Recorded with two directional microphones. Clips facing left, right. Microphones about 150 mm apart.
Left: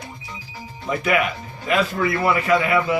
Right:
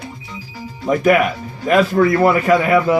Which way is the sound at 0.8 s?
45° right (ahead or behind).